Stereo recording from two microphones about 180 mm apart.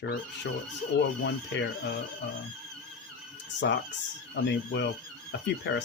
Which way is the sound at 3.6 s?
75° left (ahead or behind).